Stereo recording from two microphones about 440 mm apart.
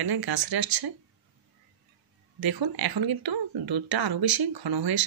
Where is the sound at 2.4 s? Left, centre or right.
Right.